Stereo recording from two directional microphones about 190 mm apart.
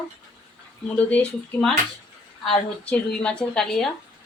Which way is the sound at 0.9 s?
5° left (ahead or behind).